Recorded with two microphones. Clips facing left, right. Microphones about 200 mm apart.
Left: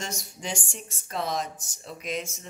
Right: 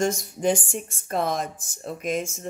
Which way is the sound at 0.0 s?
50° right (ahead or behind).